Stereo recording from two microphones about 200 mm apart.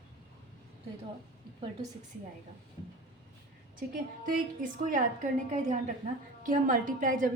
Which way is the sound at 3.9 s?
45° right (ahead or behind).